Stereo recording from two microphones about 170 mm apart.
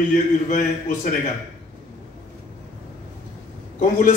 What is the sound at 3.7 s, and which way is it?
Speech, 45° left (ahead or behind).